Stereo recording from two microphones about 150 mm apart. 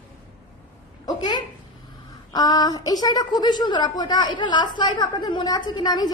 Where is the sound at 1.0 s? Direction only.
30° left (ahead or behind).